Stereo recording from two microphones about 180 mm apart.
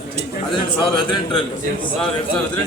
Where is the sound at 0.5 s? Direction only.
25° left (ahead or behind).